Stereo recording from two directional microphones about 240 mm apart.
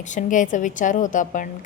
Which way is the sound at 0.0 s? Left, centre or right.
Left.